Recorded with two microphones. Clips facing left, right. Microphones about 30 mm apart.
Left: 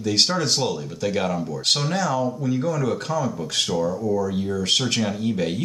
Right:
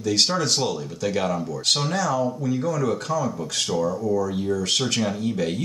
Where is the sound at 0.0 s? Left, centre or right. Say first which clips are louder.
Left 1 dB; left.